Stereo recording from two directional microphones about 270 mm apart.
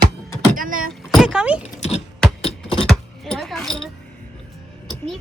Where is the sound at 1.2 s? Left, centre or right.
Centre.